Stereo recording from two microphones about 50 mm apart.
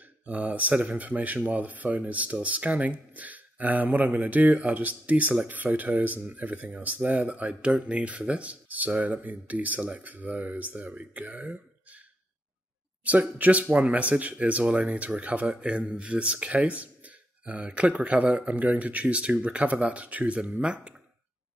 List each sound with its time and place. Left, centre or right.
0.3 s speech: right
13.0 s speech: right